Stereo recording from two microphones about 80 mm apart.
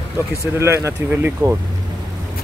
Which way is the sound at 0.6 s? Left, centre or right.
Right.